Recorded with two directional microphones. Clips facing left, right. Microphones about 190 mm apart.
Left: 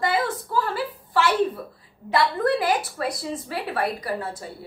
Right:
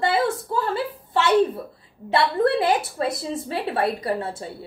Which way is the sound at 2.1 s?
25° right (ahead or behind).